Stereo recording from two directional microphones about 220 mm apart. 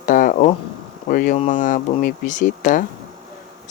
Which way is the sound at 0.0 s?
35° left (ahead or behind).